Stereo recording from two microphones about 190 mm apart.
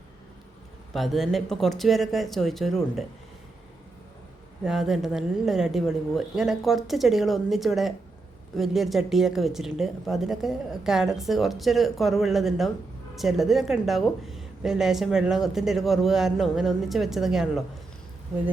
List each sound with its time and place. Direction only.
0.9 s a woman's voice: centre (ahead or behind)
4.6 s a woman's voice: centre (ahead or behind)